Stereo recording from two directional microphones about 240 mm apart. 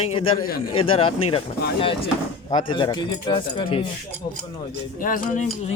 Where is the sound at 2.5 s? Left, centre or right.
Centre.